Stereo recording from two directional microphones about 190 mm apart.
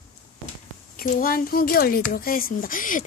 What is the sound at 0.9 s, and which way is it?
Speech, 45° left (ahead or behind).